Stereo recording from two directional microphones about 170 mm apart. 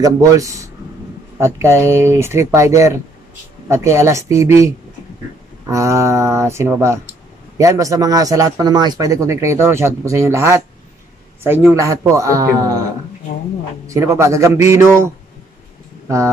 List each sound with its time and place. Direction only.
0.0 s speech: 20° right (ahead or behind)
11.7 s speech: 20° right (ahead or behind)
13.8 s speech: 20° right (ahead or behind)